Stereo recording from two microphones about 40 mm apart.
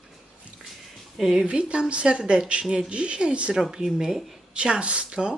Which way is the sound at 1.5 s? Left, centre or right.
Right.